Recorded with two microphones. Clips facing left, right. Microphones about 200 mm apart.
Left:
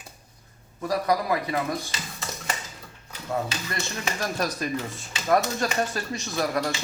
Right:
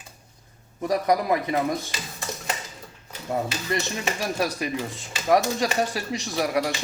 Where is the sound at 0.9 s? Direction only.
20° right (ahead or behind).